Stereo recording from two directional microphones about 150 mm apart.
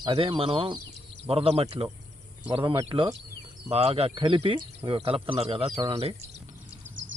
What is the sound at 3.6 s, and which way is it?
Speech, 40° right (ahead or behind).